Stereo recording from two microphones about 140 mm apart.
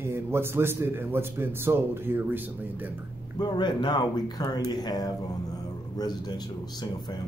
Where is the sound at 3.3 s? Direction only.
30° left (ahead or behind).